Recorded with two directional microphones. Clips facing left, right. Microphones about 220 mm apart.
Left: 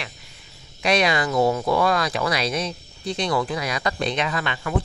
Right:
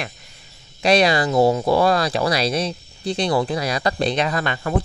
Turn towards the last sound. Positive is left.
turn(degrees=-40)  # may be behind; listen again after turning